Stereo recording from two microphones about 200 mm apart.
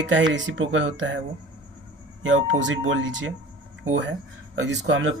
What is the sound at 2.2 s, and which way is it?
Speech, 65° right (ahead or behind).